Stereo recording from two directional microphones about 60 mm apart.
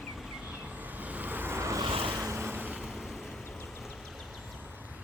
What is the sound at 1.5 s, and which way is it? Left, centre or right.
Vehicle, right.